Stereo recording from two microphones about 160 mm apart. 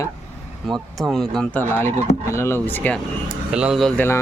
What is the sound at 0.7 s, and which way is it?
Speech, centre (ahead or behind).